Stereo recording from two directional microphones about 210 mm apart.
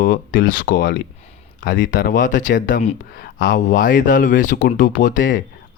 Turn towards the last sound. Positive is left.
turn(degrees=40)  # may be behind; listen again after turning